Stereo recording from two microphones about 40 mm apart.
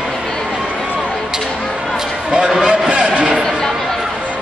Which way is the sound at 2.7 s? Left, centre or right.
Right.